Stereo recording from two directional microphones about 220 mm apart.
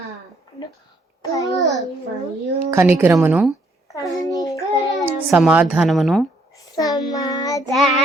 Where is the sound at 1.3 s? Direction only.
15° left (ahead or behind).